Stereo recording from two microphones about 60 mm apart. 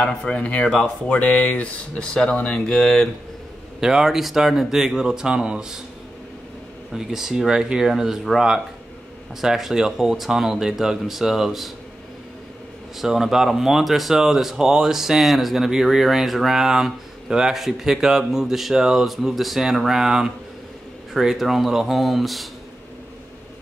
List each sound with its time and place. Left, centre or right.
0.0 s speech: left
3.8 s speech: centre
6.9 s speech: centre
13.0 s speech: centre